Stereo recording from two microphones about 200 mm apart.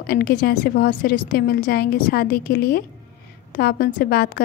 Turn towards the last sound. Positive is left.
turn(degrees=50)  # may be behind; listen again after turning